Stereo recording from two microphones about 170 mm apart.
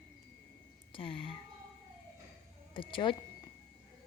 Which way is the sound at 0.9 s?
30° left (ahead or behind).